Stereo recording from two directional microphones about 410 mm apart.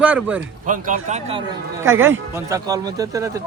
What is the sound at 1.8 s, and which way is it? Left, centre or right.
Speech, centre.